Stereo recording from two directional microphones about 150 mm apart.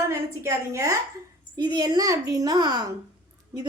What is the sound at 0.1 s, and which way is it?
A woman's voice, 20° right (ahead or behind).